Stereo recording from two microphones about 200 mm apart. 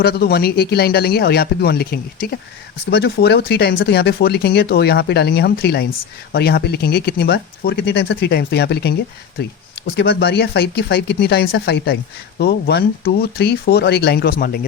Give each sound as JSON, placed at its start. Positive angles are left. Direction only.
{"t": 0.0, "sound": "speech", "side_deg": 50}